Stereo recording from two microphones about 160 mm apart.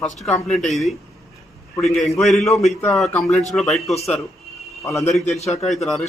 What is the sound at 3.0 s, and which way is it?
Speech, centre (ahead or behind).